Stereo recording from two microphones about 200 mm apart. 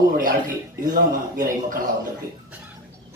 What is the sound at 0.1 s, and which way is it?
A man's voice, 45° right (ahead or behind).